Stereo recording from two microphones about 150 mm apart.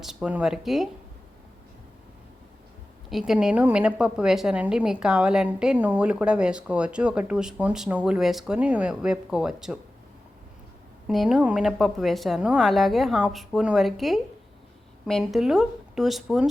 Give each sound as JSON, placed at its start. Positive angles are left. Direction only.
{"t": 0.0, "sound": "a woman's voice", "side_deg": -5}
{"t": 3.1, "sound": "a woman's voice", "side_deg": 0}
{"t": 11.1, "sound": "a woman's voice", "side_deg": 0}